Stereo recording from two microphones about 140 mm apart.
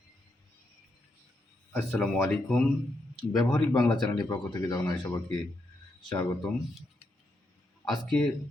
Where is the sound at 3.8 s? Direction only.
30° left (ahead or behind).